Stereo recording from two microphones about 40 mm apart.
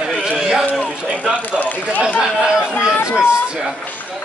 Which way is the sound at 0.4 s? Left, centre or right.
Centre.